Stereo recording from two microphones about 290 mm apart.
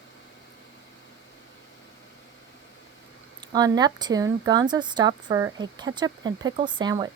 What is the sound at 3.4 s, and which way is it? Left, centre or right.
Speech, centre.